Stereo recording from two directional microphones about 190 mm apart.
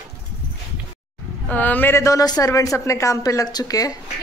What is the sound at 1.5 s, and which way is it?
A woman's voice, 10° left (ahead or behind).